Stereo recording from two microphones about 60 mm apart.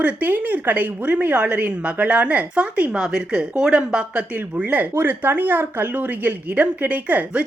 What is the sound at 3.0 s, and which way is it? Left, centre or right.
Speech, centre.